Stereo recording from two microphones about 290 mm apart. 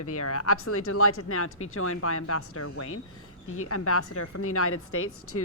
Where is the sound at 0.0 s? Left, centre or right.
Left.